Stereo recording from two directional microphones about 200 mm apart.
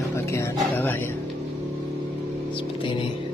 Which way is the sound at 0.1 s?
15° left (ahead or behind).